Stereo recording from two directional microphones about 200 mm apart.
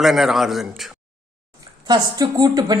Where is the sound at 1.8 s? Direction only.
20° right (ahead or behind).